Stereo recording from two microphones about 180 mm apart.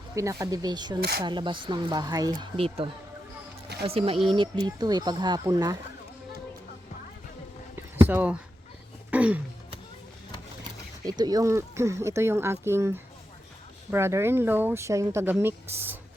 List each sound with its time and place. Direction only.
0.1 s speech: 15° right (ahead or behind)
2.4 s speech: 30° right (ahead or behind)
8.0 s speech: 10° right (ahead or behind)
9.0 s a sound: 10° right (ahead or behind)
10.6 s speech: 20° right (ahead or behind)